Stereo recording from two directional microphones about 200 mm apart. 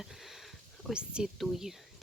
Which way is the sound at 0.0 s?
Centre (ahead or behind).